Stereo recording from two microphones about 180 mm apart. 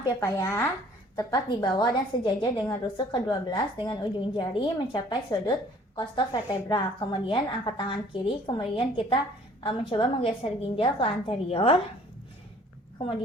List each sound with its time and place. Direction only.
0.0 s a woman's voice: 20° left (ahead or behind); by 11.8 s 35° left (ahead or behind)